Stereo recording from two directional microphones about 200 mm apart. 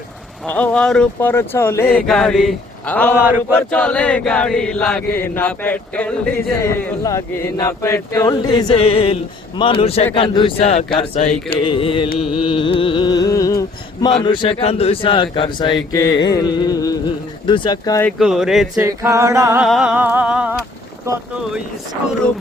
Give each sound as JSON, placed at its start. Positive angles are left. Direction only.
{"t": 0.4, "sound": "chant", "side_deg": 5}
{"t": 9.6, "sound": "speech", "side_deg": 25}
{"t": 12.2, "sound": "a sound", "side_deg": -5}
{"t": 12.5, "sound": "carnatic music", "side_deg": 25}
{"t": 14.2, "sound": "speech", "side_deg": 25}
{"t": 18.2, "sound": "a sound", "side_deg": -5}
{"t": 18.8, "sound": "singing", "side_deg": -15}
{"t": 19.6, "sound": "a sound", "side_deg": -5}
{"t": 21.1, "sound": "singing", "side_deg": -15}